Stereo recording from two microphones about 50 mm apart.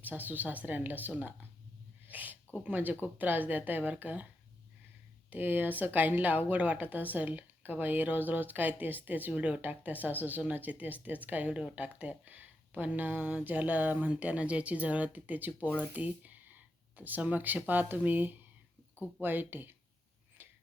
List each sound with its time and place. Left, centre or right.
0.0 s speech: right
5.3 s speech: right
11.5 s speech: right
20.4 s whispering: right